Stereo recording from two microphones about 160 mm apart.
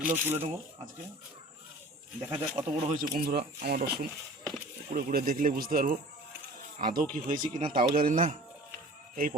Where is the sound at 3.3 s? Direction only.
75° right (ahead or behind).